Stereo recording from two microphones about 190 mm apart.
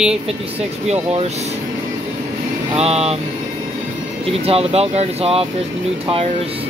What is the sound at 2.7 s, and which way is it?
Speech, 35° right (ahead or behind).